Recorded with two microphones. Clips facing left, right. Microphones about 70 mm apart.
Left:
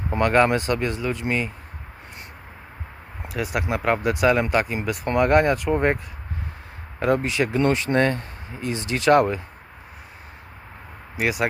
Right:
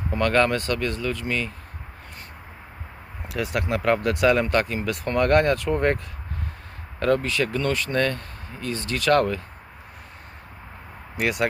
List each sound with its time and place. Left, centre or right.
0.2 s speech: centre
3.2 s speech: centre
7.0 s speech: centre
11.2 s speech: centre